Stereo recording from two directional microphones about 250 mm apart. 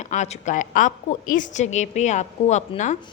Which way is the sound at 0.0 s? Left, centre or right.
Left.